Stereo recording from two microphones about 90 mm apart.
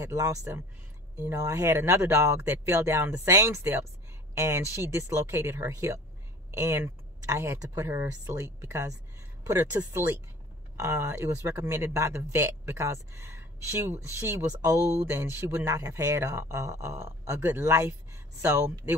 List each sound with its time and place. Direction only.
0.0 s speech: 35° right (ahead or behind)
14.5 s speech: 45° right (ahead or behind)